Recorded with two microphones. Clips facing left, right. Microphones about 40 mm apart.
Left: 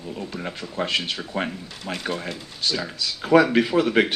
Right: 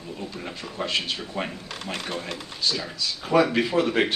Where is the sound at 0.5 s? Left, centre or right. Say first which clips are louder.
Left 2 dB; left.